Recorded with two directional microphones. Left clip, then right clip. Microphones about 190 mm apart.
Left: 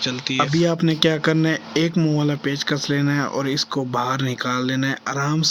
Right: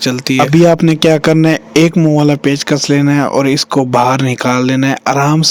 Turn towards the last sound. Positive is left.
turn(degrees=-50)  # may be behind; listen again after turning